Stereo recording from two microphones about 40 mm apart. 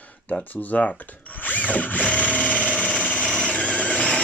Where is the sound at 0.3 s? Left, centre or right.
Left.